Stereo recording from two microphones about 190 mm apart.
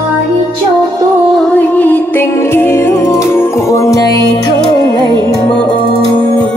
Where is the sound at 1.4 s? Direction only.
10° left (ahead or behind).